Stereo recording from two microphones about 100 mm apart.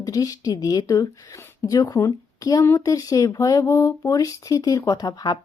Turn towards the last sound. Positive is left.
turn(degrees=40)  # may be behind; listen again after turning